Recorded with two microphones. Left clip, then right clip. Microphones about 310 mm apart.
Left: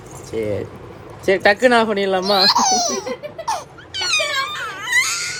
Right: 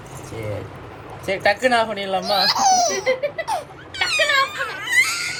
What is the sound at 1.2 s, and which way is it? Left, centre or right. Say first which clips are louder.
Speech: left 5 dB; left.